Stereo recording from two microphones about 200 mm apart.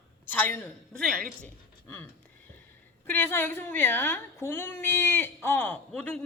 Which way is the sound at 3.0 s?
10° left (ahead or behind).